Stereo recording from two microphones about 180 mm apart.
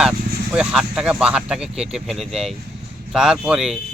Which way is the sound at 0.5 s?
5° right (ahead or behind).